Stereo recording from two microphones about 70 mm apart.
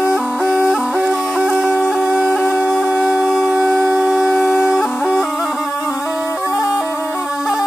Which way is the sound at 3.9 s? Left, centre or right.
Centre.